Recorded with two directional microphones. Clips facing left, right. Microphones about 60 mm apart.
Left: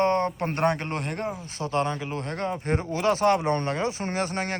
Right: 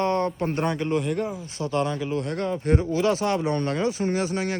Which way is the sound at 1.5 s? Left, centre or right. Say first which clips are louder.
Right 1 dB; left.